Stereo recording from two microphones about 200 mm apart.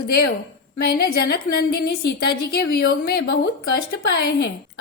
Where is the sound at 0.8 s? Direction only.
50° left (ahead or behind).